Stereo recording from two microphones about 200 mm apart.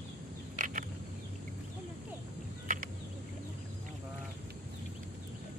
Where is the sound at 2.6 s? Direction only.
40° right (ahead or behind).